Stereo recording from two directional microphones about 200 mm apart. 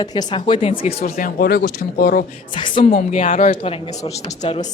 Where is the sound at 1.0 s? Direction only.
45° left (ahead or behind).